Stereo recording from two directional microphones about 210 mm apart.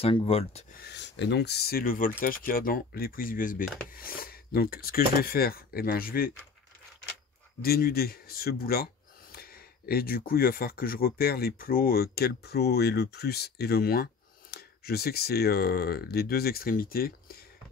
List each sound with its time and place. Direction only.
0.0 s speech: 25° left (ahead or behind)
0.7 s speech: 55° left (ahead or behind)
7.6 s speech: 45° left (ahead or behind)